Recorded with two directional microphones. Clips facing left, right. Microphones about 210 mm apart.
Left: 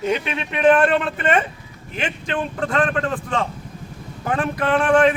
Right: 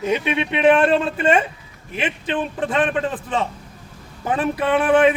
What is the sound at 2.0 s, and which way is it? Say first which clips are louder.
A man's voice: right 1 dB; 5° right (ahead or behind).